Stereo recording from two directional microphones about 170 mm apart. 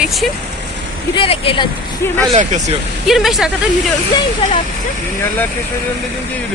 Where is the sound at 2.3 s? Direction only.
45° right (ahead or behind).